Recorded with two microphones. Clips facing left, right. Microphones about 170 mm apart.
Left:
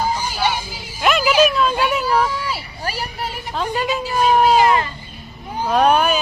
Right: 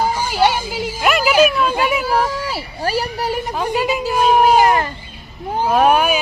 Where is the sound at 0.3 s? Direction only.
70° right (ahead or behind).